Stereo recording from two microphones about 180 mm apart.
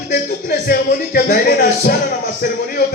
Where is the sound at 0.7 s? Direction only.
55° left (ahead or behind).